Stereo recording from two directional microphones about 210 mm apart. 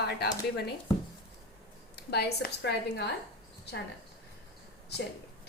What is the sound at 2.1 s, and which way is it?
A woman's voice, 50° left (ahead or behind).